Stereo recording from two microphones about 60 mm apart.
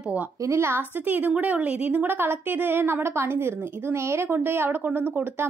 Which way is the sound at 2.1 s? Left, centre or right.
Right.